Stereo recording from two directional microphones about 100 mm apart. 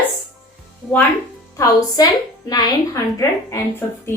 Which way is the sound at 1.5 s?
35° left (ahead or behind).